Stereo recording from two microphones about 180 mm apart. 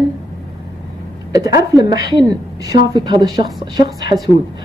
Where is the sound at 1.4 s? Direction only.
20° right (ahead or behind).